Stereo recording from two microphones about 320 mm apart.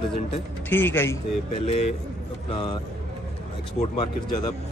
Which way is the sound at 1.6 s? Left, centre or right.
Centre.